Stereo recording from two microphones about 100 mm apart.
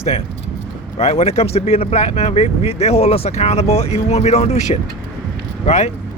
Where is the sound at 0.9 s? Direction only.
90° left.